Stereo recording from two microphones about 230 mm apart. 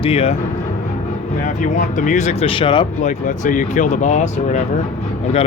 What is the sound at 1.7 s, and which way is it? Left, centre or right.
Speech, left.